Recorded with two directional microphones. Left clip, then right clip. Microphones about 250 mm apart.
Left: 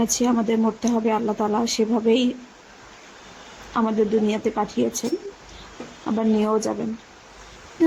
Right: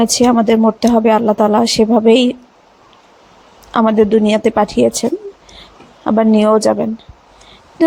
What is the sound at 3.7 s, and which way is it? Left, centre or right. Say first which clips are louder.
A woman's voice: right 10 dB; right.